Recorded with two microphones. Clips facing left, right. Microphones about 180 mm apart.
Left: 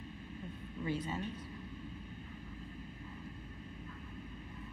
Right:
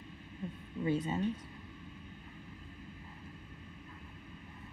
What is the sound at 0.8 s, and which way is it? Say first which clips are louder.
Speech: right 5 dB; 25° right (ahead or behind).